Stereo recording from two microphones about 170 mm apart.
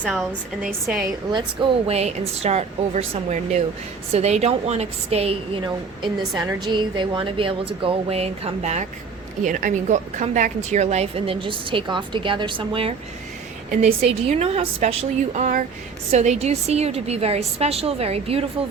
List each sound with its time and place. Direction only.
0.0 s a woman's voice: centre (ahead or behind)
1.9 s a woman's voice: 40° right (ahead or behind)
14.2 s a woman's voice: 35° right (ahead or behind)